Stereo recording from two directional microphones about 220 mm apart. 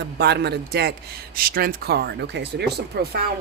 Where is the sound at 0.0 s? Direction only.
50° right (ahead or behind).